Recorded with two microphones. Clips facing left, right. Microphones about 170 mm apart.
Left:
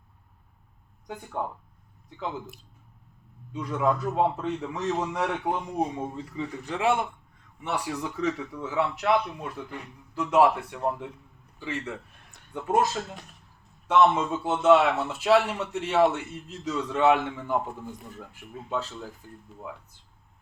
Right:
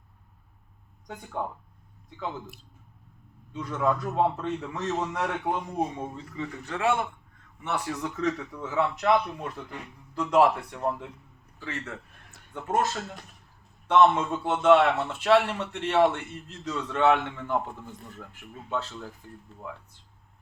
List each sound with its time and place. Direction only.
1.0 s a man's voice: 10° left (ahead or behind)
3.5 s a man's voice: 10° left (ahead or behind)